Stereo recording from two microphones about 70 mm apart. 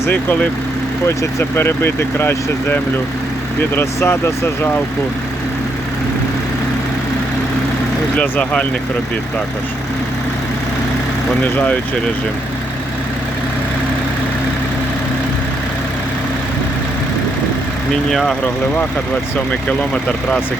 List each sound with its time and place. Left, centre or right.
1.0 s speech: left
8.2 s speech: centre
11.5 s speech: left
18.1 s speech: centre
19.9 s speech: centre